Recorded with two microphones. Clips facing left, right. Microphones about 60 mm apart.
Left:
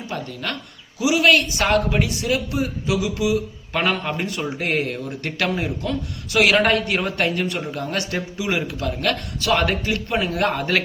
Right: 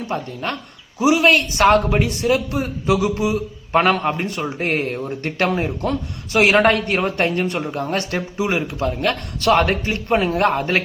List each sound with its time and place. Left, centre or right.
0.9 s a man's voice: right
9.4 s a man's voice: right